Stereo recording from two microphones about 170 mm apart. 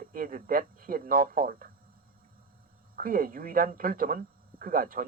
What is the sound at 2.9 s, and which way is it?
Speech, 55° right (ahead or behind).